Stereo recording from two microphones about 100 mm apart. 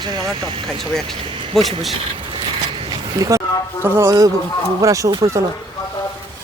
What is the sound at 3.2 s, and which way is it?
Speech, 35° right (ahead or behind).